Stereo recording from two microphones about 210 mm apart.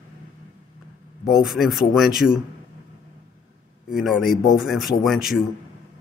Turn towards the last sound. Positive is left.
turn(degrees=0)  # may be behind; listen again after turning